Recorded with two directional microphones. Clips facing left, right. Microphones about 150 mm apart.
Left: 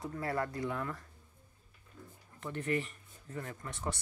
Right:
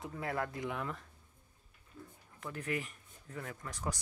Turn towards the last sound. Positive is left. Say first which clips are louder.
# left 2 dB
turn(degrees=0)  # may be behind; listen again after turning